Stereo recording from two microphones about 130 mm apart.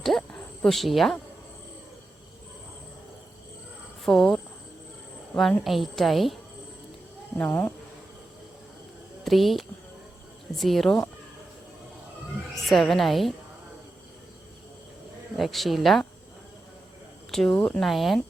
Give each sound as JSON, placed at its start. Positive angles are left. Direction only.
{"t": 0.0, "sound": "speech", "side_deg": 0}
{"t": 4.0, "sound": "speech", "side_deg": 0}
{"t": 5.4, "sound": "a woman's voice", "side_deg": 5}
{"t": 7.3, "sound": "speech", "side_deg": 10}
{"t": 9.2, "sound": "a woman's voice", "side_deg": 0}
{"t": 12.6, "sound": "a woman's voice", "side_deg": 0}
{"t": 15.4, "sound": "a woman's voice", "side_deg": 0}
{"t": 17.5, "sound": "a woman's voice", "side_deg": 10}